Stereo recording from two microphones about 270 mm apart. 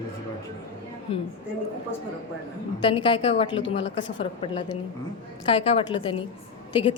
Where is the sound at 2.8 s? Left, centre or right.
Centre.